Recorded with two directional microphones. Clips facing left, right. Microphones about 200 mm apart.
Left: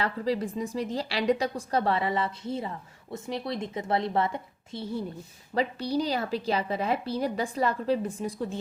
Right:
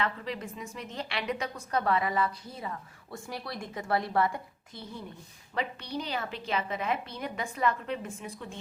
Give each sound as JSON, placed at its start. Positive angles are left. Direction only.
{"t": 0.0, "sound": "a woman's voice", "side_deg": 35}